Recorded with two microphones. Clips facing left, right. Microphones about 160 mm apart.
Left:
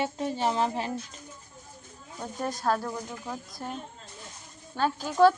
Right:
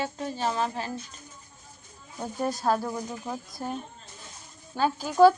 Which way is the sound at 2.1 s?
5° right (ahead or behind).